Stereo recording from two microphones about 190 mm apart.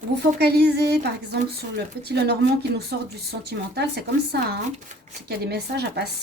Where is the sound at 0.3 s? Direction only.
60° right (ahead or behind).